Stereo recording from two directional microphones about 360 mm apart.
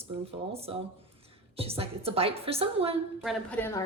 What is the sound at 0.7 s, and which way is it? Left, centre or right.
Speech, centre.